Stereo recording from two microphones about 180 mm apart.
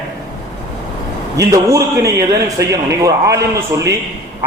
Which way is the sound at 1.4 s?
15° right (ahead or behind).